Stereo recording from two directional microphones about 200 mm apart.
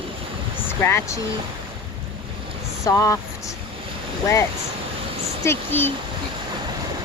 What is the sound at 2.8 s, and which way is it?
Speech, 15° left (ahead or behind).